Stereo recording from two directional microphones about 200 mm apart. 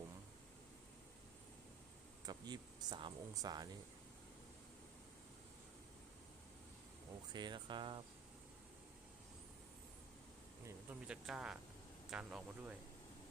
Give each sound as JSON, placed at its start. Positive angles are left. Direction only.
{"t": 2.2, "sound": "speech", "side_deg": -20}
{"t": 7.3, "sound": "speech", "side_deg": -20}
{"t": 11.0, "sound": "speech", "side_deg": -5}